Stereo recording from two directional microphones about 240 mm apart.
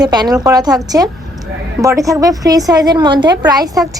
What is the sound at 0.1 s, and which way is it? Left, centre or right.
A woman's voice, centre.